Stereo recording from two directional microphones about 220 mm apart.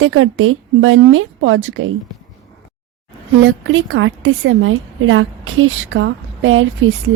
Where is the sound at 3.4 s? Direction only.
60° right (ahead or behind).